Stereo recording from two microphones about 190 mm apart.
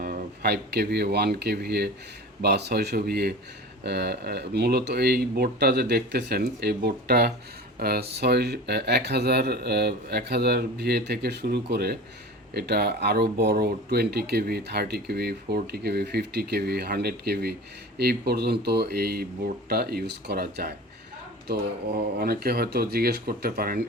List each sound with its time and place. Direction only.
0.0 s speech: 55° right (ahead or behind)